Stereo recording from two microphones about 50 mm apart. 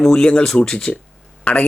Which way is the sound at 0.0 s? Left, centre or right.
Centre.